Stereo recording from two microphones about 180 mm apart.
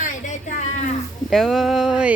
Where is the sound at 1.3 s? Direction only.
Centre (ahead or behind).